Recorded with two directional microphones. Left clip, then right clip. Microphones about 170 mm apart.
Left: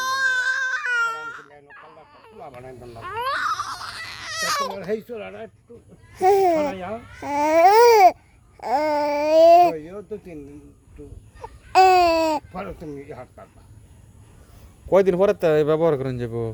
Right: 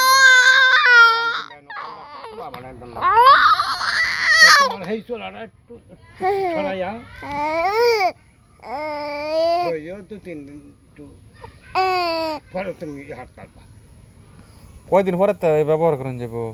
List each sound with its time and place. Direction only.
0.0 s baby cry: 20° right (ahead or behind)
1.4 s baby cry: 30° right (ahead or behind)
3.0 s a sound: 35° right (ahead or behind)
3.4 s crying: 10° right (ahead or behind)
4.8 s speech: 35° left (ahead or behind)
11.7 s babbling: 45° left (ahead or behind)
12.5 s speech: 25° left (ahead or behind)
14.8 s speech: 40° left (ahead or behind)